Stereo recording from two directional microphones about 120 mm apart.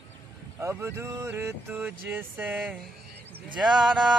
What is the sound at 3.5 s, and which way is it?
Speech, 5° right (ahead or behind).